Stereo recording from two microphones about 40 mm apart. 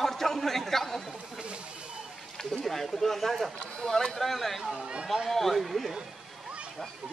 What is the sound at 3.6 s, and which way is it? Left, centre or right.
Speech, left.